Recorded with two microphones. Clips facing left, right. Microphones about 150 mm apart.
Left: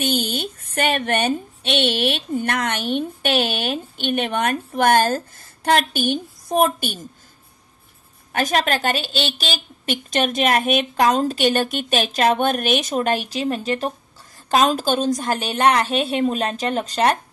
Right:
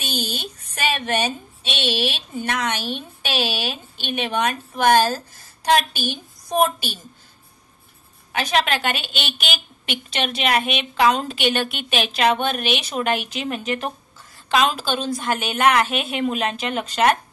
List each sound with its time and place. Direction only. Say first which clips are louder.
0.0 s a woman's voice: left 6 dB; 55° left (ahead or behind)
8.3 s a woman's voice: left 1 dB; 45° left (ahead or behind)